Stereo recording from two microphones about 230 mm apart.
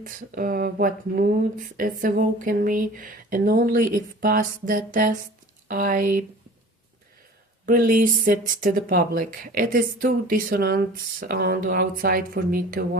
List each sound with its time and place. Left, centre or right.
0.0 s speech: right
7.6 s speech: right